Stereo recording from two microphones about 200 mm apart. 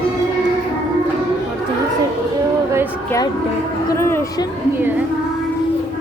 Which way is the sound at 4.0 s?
10° left (ahead or behind).